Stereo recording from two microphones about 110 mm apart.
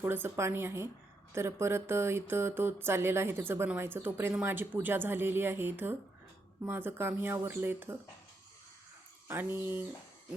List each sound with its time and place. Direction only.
0.0 s speech: 20° right (ahead or behind)
9.2 s speech: 20° right (ahead or behind)